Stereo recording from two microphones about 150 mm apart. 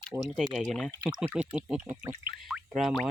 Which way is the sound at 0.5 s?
Centre (ahead or behind).